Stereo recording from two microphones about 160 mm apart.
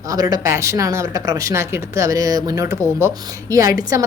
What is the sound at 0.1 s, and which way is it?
Speech, 25° right (ahead or behind).